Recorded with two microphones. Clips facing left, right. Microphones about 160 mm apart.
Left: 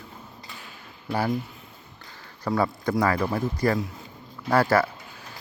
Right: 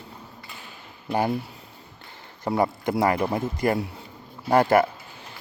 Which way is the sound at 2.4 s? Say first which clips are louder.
Right 1 dB; 20° right (ahead or behind).